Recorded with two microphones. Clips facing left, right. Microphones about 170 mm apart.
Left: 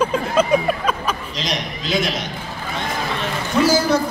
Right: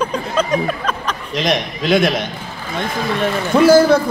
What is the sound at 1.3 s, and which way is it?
A man's voice, 55° right (ahead or behind).